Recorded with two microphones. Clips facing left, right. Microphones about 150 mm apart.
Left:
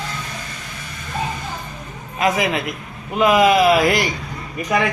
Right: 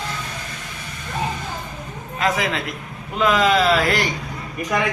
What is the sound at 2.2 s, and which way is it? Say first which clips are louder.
A man's voice: left 3 dB; 15° left (ahead or behind).